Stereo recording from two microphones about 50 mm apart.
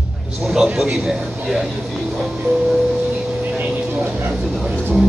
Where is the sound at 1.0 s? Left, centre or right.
Centre.